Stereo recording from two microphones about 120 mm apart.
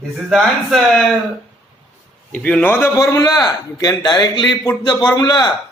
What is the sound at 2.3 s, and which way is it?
Speech, 10° left (ahead or behind).